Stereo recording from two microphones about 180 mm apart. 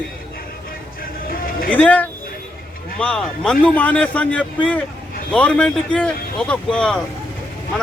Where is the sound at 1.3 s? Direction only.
55° left (ahead or behind).